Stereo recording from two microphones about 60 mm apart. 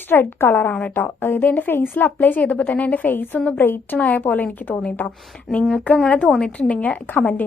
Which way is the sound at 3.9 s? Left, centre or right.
Left.